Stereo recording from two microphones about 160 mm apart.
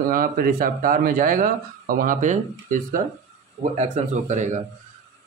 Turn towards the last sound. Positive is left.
turn(degrees=-50)  # may be behind; listen again after turning